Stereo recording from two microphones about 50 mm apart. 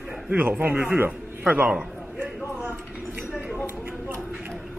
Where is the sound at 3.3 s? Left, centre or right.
Right.